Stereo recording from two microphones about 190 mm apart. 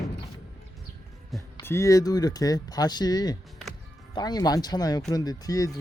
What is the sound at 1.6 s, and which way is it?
Speech, 15° left (ahead or behind).